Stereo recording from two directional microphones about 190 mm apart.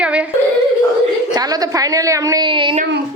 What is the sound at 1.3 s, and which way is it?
A woman's voice, 20° right (ahead or behind).